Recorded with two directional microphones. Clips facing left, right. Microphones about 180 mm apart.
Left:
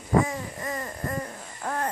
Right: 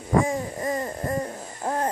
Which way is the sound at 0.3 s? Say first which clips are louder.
Right 6 dB; 25° right (ahead or behind).